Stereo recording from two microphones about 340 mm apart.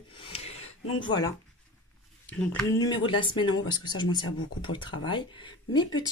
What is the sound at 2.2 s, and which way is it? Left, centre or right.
Speech, centre.